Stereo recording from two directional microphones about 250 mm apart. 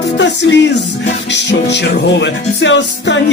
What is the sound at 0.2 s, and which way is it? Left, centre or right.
Music, left.